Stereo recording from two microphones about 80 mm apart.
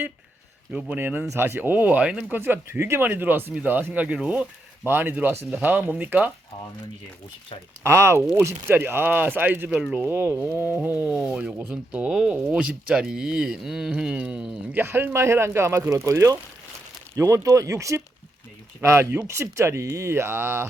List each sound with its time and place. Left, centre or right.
0.7 s speech: centre
2.4 s speech: right
4.9 s speech: right
7.9 s speech: right
9.6 s speech: centre
10.0 s speech: right; by 14.5 s centre
14.7 s speech: right